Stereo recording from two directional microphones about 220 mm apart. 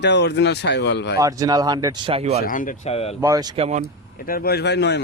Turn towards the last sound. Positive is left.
turn(degrees=50)  # may be behind; listen again after turning